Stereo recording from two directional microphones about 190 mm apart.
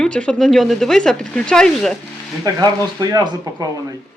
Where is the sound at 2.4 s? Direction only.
20° right (ahead or behind).